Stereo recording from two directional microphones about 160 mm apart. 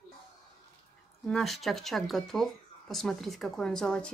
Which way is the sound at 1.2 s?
5° left (ahead or behind).